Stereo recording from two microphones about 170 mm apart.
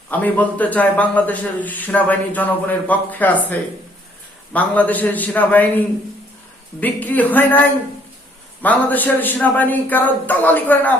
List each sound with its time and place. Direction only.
0.1 s a man's voice: 10° left (ahead or behind)